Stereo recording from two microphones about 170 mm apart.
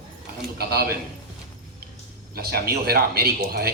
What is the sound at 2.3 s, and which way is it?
Speech, 65° right (ahead or behind).